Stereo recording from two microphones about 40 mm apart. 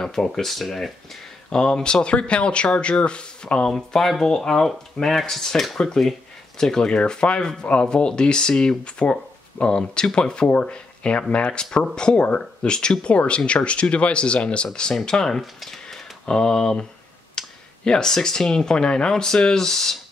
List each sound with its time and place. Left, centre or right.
0.0 s speech: centre
1.5 s speech: left
3.6 s speech: centre
7.0 s speech: left
7.6 s speech: left
8.2 s speech: left